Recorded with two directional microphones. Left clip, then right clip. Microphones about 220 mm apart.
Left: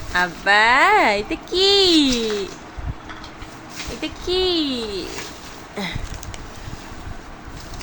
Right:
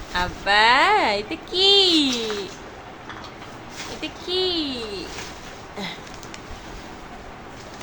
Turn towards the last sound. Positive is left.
turn(degrees=25)  # may be behind; listen again after turning